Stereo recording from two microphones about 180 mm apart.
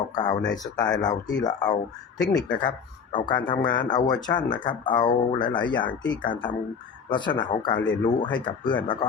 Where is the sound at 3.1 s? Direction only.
25° left (ahead or behind).